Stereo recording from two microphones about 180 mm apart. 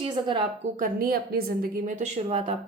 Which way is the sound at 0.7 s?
55° right (ahead or behind).